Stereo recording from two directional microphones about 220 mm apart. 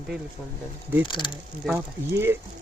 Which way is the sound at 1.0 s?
20° left (ahead or behind).